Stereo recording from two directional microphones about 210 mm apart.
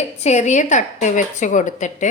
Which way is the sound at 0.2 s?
30° left (ahead or behind).